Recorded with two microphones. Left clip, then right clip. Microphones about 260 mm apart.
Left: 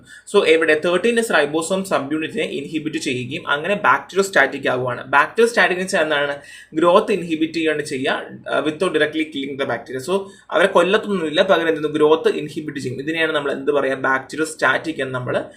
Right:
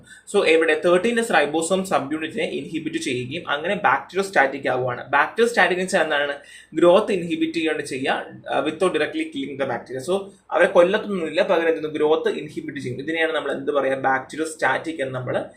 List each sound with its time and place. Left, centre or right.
0.3 s speech: centre